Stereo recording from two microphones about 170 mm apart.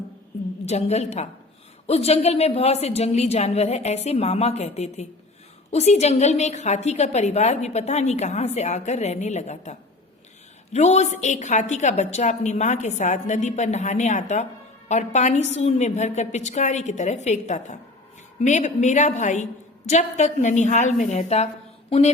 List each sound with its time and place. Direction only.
0.6 s a woman's voice: 40° left (ahead or behind)